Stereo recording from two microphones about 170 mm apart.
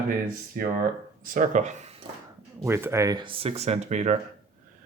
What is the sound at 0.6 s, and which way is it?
Speech, 55° right (ahead or behind).